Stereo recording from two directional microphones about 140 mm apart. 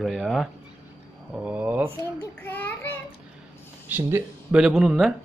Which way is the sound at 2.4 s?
15° left (ahead or behind).